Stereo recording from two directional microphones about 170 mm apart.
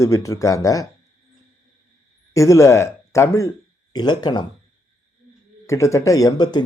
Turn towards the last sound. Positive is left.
turn(degrees=20)  # may be behind; listen again after turning